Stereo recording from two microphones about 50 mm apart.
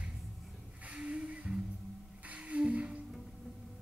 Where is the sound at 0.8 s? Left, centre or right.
Right.